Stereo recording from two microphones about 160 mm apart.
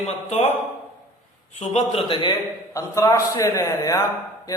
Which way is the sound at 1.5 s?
40° left (ahead or behind).